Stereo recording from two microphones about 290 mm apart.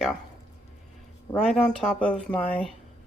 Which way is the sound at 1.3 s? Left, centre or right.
Centre.